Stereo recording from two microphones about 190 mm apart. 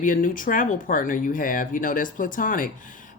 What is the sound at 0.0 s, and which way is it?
A woman's voice, 45° left (ahead or behind).